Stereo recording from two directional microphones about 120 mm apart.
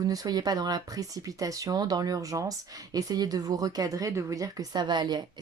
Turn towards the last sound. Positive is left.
turn(degrees=-35)  # may be behind; listen again after turning